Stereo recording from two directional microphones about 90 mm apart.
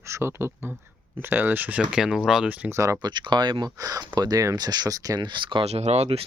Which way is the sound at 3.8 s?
40° right (ahead or behind).